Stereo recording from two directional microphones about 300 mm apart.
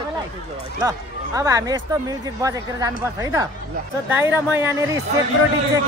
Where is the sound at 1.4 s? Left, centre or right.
Centre.